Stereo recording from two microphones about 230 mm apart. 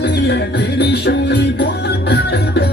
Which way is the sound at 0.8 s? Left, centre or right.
Left.